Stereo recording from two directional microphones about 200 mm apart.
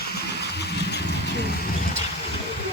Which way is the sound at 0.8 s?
55° left (ahead or behind).